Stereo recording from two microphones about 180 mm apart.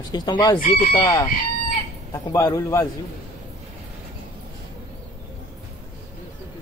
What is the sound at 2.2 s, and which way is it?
Speech, 20° left (ahead or behind).